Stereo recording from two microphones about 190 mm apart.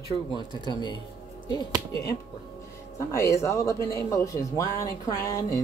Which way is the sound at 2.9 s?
15° left (ahead or behind).